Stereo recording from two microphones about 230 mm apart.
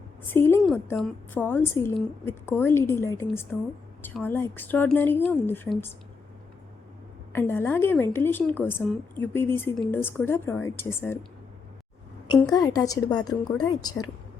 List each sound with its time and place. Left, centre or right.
0.3 s a woman's voice: centre
7.3 s a woman's voice: centre
12.4 s a woman's voice: centre